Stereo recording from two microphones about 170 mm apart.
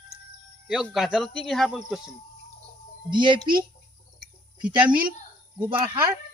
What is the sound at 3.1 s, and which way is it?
Speech, 25° right (ahead or behind).